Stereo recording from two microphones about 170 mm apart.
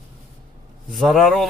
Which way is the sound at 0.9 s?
Centre (ahead or behind).